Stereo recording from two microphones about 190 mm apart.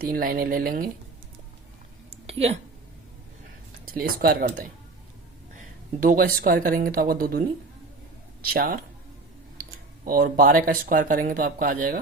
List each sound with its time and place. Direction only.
0.0 s speech: 50° right (ahead or behind)
2.2 s a sound: 35° right (ahead or behind)
3.8 s speech: 50° right (ahead or behind)
5.5 s speech: 45° right (ahead or behind)
8.4 s speech: 50° right (ahead or behind)